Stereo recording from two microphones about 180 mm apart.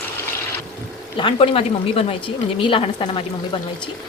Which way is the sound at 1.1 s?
30° left (ahead or behind).